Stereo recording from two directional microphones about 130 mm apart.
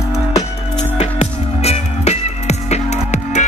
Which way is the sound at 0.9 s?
55° left (ahead or behind).